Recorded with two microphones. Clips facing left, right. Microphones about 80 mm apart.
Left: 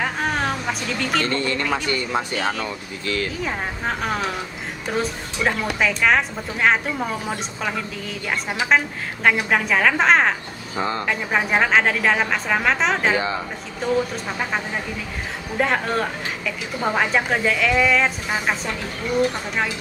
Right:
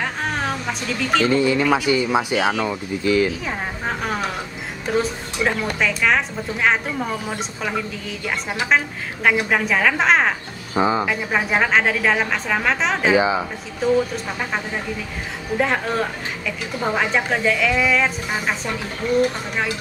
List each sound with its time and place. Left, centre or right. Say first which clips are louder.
0.0 s speech: left 1 dB; centre
3.4 s a woman's voice: even; centre
10.7 s speech: right 5 dB; centre
11.3 s a woman's voice: even; centre
13.1 s a woman's voice: right 5 dB; centre